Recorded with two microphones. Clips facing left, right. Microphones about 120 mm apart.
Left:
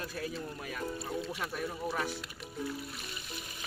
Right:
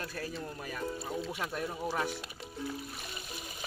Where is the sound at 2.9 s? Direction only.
35° right (ahead or behind).